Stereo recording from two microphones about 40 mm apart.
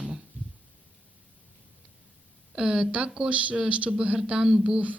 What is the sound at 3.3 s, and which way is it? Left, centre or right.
Speech, right.